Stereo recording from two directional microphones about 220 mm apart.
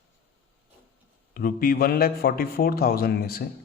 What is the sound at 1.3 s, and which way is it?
A man's voice, 40° left (ahead or behind).